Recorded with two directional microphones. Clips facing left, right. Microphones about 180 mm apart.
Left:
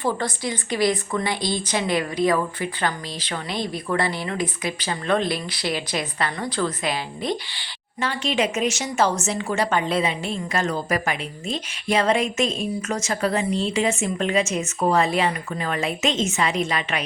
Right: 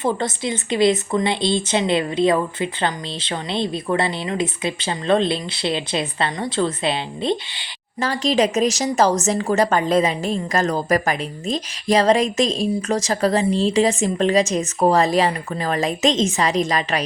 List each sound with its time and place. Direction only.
0.0 s a woman's voice: 25° right (ahead or behind)
8.0 s a woman's voice: 40° right (ahead or behind)